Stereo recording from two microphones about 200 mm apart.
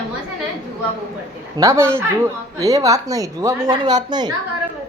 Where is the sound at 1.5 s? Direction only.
15° right (ahead or behind).